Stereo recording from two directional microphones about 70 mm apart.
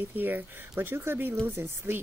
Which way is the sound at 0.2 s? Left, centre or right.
Right.